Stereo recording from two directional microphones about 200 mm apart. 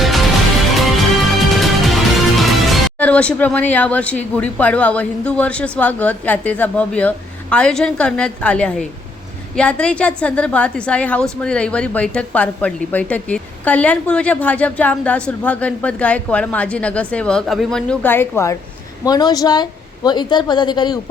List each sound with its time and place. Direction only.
0.8 s music: centre (ahead or behind)
4.4 s a woman's voice: 5° left (ahead or behind)